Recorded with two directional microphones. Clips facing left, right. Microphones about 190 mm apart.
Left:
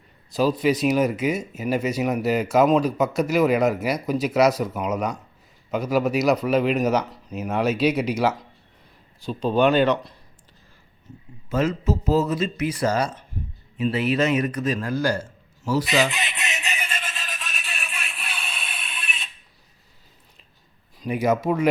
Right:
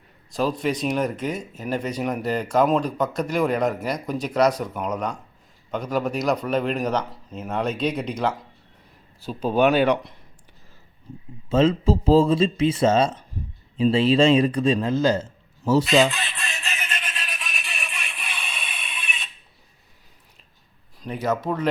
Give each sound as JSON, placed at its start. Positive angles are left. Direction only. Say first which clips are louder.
{"t": 0.3, "sound": "speech", "louder": "left 3 dB", "side_deg": 5}
{"t": 9.2, "sound": "speech", "louder": "even", "side_deg": -5}
{"t": 11.4, "sound": "a man's voice", "louder": "right 4 dB", "side_deg": -25}
{"t": 16.1, "sound": "music", "louder": "left 2 dB", "side_deg": 20}
{"t": 17.4, "sound": "music", "louder": "even", "side_deg": 0}
{"t": 21.1, "sound": "speech", "louder": "left 3 dB", "side_deg": 10}